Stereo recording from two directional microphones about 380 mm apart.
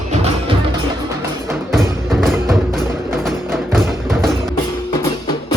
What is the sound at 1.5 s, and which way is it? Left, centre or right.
Music, centre.